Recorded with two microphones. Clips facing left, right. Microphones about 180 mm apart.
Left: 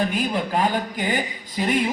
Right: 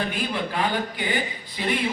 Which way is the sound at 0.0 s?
45° left (ahead or behind).